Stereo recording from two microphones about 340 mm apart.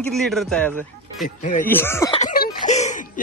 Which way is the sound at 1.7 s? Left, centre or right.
Centre.